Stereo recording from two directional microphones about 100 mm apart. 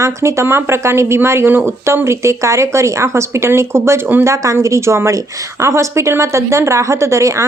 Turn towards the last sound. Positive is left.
turn(degrees=-30)  # may be behind; listen again after turning